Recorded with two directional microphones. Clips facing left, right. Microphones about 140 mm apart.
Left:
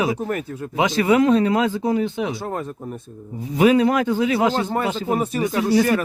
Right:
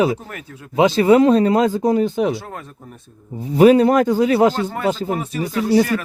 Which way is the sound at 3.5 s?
35° right (ahead or behind).